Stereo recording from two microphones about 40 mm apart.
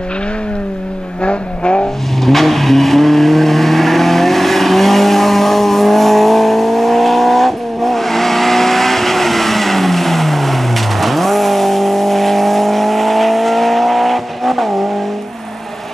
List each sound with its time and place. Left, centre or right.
1.2 s vehicle: left
2.2 s vehicle: centre